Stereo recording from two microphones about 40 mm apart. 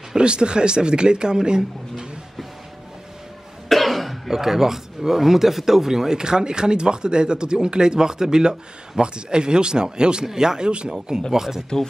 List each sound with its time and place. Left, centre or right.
0.1 s speech: right
3.6 s cough: centre
4.3 s speech: centre